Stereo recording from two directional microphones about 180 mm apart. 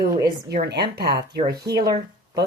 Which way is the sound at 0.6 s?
65° right (ahead or behind).